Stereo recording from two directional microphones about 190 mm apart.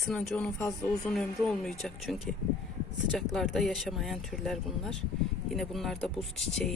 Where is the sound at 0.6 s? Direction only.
15° left (ahead or behind).